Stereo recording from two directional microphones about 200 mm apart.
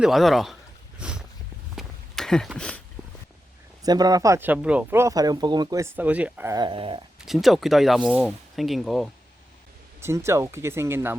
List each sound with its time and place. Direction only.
0.0 s speech: centre (ahead or behind)
0.9 s a sound: 5° right (ahead or behind)
3.8 s speech: 20° right (ahead or behind)
7.2 s speech: centre (ahead or behind)
10.0 s speech: 15° right (ahead or behind)